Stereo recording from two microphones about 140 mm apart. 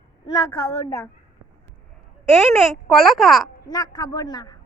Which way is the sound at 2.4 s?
Centre (ahead or behind).